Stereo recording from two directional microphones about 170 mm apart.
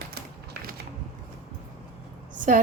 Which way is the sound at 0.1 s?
60° right (ahead or behind).